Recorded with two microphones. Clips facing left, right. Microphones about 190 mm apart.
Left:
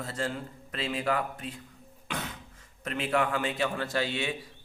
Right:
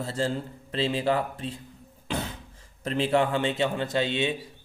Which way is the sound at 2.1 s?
30° right (ahead or behind).